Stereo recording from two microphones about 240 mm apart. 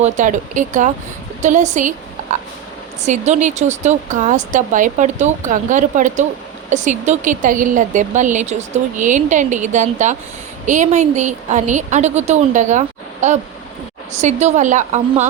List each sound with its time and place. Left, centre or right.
0.0 s speech: right
3.1 s a woman's voice: right